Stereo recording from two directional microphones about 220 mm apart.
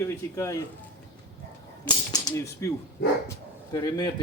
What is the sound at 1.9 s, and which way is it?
Speech, 15° left (ahead or behind).